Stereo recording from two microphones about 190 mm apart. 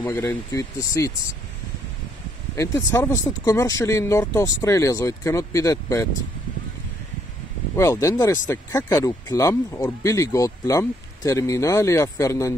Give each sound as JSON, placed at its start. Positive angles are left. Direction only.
{"t": 0.0, "sound": "speech", "side_deg": 10}
{"t": 2.5, "sound": "speech", "side_deg": 15}
{"t": 7.7, "sound": "speech", "side_deg": 15}